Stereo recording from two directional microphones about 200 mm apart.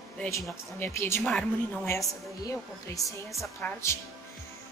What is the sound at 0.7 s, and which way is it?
A woman's voice, 10° left (ahead or behind).